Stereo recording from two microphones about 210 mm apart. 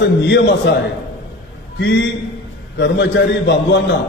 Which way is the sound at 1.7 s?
55° left (ahead or behind).